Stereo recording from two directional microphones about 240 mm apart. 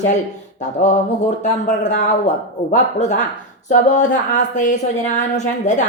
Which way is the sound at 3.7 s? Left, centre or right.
Left.